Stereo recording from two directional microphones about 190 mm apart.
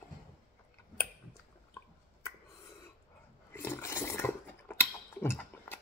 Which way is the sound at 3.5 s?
10° left (ahead or behind).